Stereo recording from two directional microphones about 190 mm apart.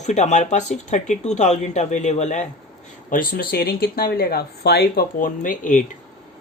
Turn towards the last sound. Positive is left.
turn(degrees=45)  # may be behind; listen again after turning